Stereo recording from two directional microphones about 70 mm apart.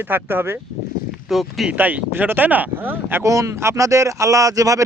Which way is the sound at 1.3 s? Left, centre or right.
Centre.